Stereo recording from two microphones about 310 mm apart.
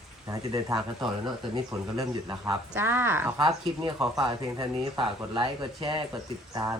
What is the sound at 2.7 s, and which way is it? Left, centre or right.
A woman's voice, centre.